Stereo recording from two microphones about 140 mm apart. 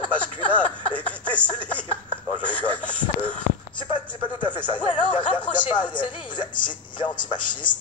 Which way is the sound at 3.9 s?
35° left (ahead or behind).